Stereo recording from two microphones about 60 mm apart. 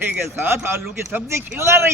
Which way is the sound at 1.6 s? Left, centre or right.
Right.